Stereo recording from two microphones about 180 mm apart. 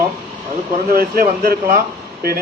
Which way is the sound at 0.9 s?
55° right (ahead or behind).